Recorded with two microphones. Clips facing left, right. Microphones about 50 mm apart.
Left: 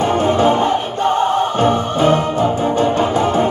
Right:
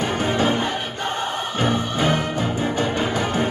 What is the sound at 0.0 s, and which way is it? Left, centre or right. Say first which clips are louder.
Music: left 7 dB; left.